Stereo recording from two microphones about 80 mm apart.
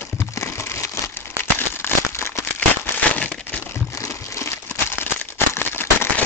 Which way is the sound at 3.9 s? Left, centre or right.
Left.